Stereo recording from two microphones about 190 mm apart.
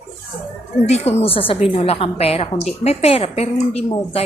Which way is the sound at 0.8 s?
35° left (ahead or behind).